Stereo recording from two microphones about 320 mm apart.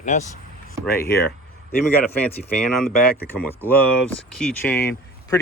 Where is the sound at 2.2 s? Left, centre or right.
Centre.